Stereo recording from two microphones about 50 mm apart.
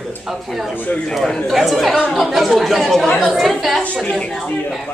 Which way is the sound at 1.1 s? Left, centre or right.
Centre.